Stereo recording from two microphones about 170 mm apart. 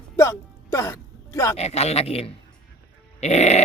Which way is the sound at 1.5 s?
40° left (ahead or behind).